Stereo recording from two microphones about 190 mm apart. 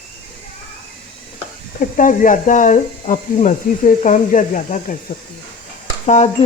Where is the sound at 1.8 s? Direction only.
45° left (ahead or behind).